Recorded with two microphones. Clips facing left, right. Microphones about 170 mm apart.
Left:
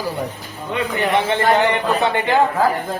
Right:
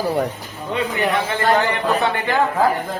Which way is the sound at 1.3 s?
20° left (ahead or behind).